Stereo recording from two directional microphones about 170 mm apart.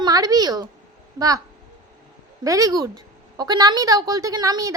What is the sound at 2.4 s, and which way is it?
A woman's voice, 20° right (ahead or behind).